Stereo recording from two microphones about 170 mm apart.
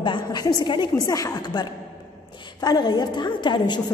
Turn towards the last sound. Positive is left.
turn(degrees=25)  # may be behind; listen again after turning